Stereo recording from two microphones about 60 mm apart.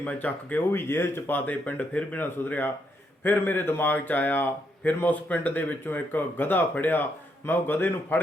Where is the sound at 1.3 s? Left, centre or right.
Left.